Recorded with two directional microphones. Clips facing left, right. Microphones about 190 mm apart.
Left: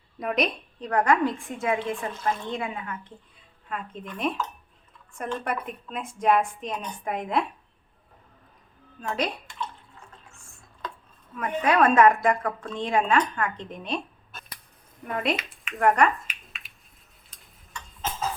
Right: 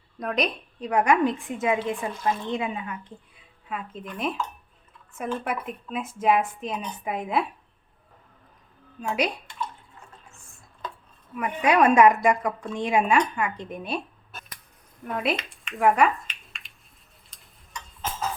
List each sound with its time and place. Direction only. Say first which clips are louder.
0.2 s a woman's voice: left 1 dB; centre (ahead or behind)
0.8 s a woman's voice: right 1 dB; 10° right (ahead or behind)
3.7 s a woman's voice: right 1 dB; 5° right (ahead or behind)
9.0 s a woman's voice: right 2 dB; 10° right (ahead or behind)
11.3 s a woman's voice: right 1 dB; 15° right (ahead or behind)
15.0 s a woman's voice: even; centre (ahead or behind)
16.2 s a sound: left 1 dB; 5° left (ahead or behind)